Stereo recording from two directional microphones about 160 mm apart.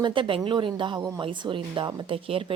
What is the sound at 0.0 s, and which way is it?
Speech, 30° right (ahead or behind).